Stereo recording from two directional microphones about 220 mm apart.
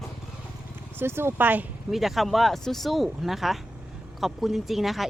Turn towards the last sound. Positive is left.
turn(degrees=0)  # may be behind; listen again after turning